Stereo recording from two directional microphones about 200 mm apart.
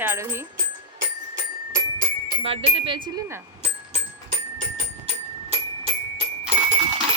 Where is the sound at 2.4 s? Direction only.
30° right (ahead or behind).